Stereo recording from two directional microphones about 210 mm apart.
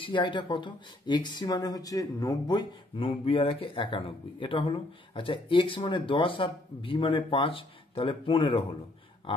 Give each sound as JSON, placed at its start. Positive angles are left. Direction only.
{"t": 0.0, "sound": "speech", "side_deg": 25}